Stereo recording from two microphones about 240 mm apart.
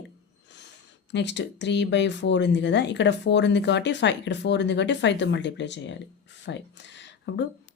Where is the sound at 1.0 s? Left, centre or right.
Left.